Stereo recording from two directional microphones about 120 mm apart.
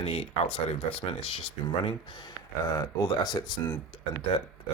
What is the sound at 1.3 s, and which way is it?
Speech, 45° left (ahead or behind).